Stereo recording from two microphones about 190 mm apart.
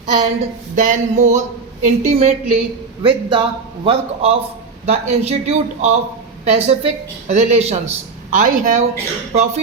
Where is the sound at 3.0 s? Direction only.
25° right (ahead or behind).